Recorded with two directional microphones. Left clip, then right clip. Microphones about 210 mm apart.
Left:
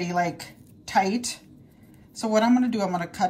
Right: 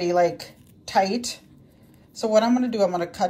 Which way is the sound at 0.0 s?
15° right (ahead or behind).